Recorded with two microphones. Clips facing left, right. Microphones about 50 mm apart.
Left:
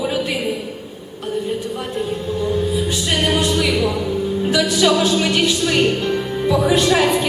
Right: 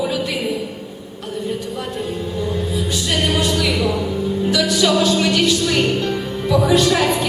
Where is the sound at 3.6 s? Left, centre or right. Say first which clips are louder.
Left 1 dB; centre.